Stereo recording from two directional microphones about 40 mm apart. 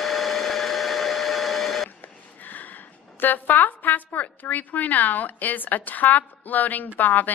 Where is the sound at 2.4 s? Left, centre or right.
Left.